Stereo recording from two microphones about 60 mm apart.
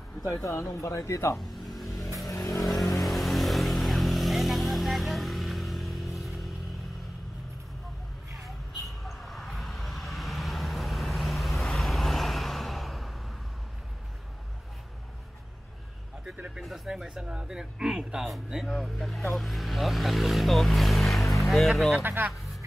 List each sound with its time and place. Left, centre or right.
0.2 s speech: left
1.4 s music: centre
2.3 s vehicle: left
3.0 s vehicle: centre
8.8 s vehicle: centre
16.6 s speech: centre
22.0 s speech: right